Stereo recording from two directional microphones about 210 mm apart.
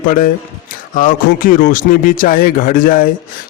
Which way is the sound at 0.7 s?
40° left (ahead or behind).